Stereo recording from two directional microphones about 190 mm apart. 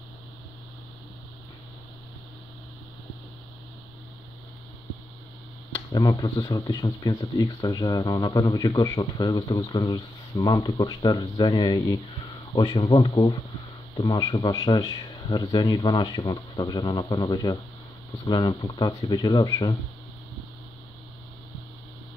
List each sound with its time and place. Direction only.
5.9 s speech: 20° left (ahead or behind)